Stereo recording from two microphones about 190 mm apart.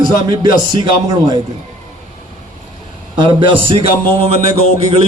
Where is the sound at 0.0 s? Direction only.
25° right (ahead or behind).